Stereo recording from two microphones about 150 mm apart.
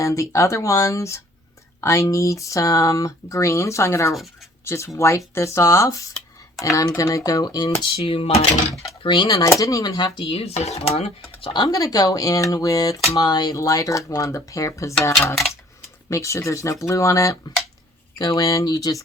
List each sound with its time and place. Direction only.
0.0 s speech: 20° left (ahead or behind)